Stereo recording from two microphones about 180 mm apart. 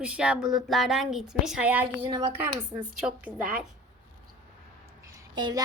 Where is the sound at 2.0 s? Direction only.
20° right (ahead or behind).